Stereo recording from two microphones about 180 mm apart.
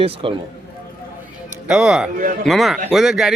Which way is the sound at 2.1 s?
50° right (ahead or behind).